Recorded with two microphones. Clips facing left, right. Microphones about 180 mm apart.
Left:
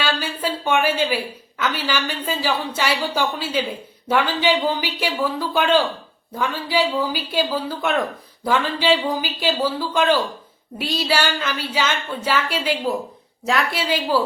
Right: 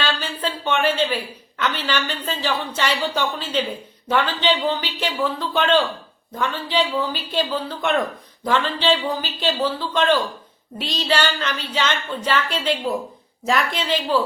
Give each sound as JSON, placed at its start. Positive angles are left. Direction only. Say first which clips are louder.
{"t": 0.0, "sound": "a woman's voice", "louder": "left 1 dB", "side_deg": 10}